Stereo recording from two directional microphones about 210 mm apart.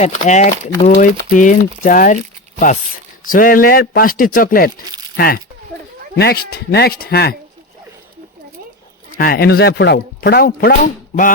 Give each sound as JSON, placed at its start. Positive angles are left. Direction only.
{"t": 0.0, "sound": "speech", "side_deg": 35}
{"t": 9.1, "sound": "speech", "side_deg": 45}